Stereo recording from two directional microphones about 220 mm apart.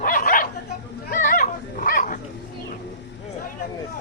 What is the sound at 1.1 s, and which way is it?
Dog, 35° left (ahead or behind).